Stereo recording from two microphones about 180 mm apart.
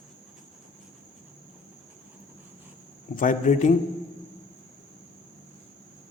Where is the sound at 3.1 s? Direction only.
45° left (ahead or behind).